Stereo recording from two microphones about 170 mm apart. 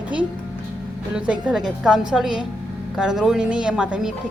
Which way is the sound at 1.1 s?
5° right (ahead or behind).